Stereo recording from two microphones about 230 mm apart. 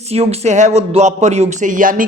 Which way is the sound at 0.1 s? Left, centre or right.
Right.